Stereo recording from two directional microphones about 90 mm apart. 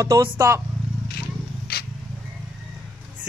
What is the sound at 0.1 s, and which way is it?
Speech, 35° right (ahead or behind).